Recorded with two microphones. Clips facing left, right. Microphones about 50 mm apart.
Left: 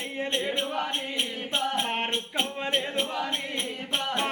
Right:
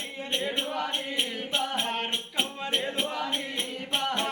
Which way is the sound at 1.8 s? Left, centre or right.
Left.